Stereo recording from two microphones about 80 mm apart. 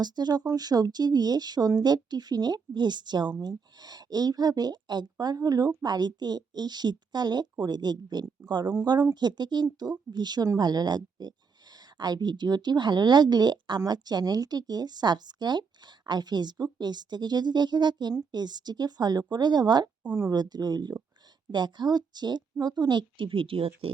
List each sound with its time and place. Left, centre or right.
0.0 s a woman's voice: right